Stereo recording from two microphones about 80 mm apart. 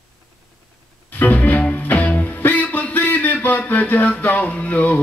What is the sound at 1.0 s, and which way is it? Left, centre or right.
Music, left.